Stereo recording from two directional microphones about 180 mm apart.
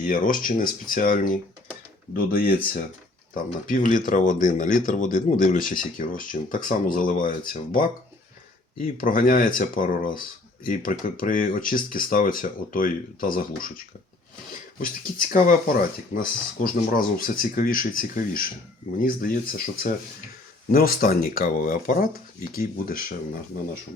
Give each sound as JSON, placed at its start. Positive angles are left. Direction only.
{"t": 0.0, "sound": "speech", "side_deg": 50}
{"t": 15.3, "sound": "speech", "side_deg": 50}